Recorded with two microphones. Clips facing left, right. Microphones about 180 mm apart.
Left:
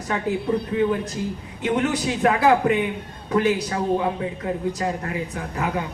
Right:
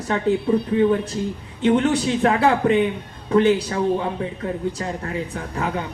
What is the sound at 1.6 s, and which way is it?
Speech, 30° right (ahead or behind).